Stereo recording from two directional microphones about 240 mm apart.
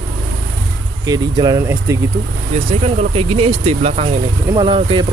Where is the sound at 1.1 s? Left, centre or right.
Centre.